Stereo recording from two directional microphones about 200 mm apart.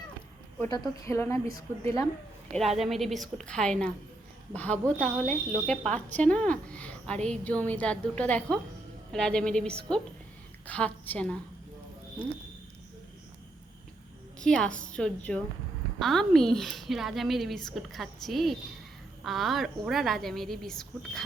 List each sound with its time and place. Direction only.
0.7 s a woman's voice: 15° left (ahead or behind)
2.5 s a woman's voice: centre (ahead or behind)
14.3 s a woman's voice: 5° left (ahead or behind)